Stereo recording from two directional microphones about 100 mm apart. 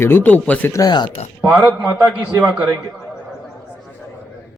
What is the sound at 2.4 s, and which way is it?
Speech, 15° right (ahead or behind).